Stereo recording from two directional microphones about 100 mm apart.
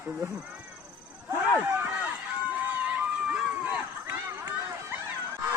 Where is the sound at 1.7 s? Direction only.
15° right (ahead or behind).